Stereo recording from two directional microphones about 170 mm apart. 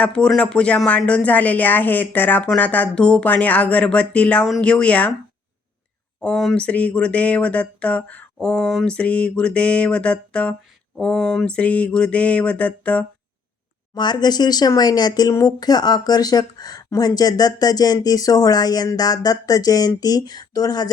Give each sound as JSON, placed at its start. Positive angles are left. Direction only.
{"t": 0.0, "sound": "speech", "side_deg": 5}
{"t": 6.1, "sound": "speech", "side_deg": 5}
{"t": 13.9, "sound": "speech", "side_deg": 25}